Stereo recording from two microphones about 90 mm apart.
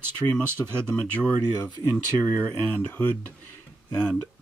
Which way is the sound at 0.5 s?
25° right (ahead or behind).